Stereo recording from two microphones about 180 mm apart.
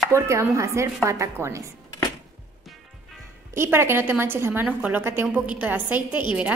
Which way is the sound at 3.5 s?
15° right (ahead or behind).